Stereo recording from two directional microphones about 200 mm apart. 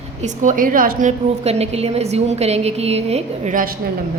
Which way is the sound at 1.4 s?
30° right (ahead or behind).